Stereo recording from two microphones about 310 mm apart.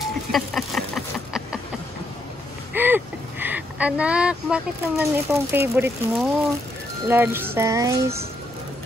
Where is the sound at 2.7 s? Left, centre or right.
Centre.